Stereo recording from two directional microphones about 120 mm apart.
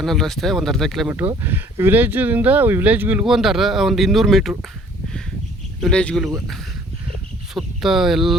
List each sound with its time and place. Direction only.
0.0 s speech: centre (ahead or behind)
1.0 s speech: 15° right (ahead or behind)
3.2 s speech: 5° right (ahead or behind)
5.8 s speech: 10° left (ahead or behind)
7.5 s speech: centre (ahead or behind)